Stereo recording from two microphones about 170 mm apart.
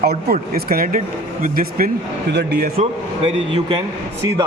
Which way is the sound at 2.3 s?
80° right.